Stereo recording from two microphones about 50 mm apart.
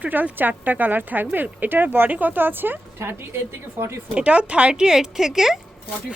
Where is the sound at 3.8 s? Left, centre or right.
Right.